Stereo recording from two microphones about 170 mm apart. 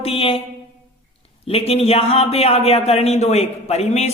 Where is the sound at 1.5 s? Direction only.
35° left (ahead or behind).